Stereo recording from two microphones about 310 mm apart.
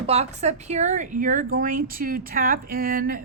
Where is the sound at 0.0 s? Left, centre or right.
Centre.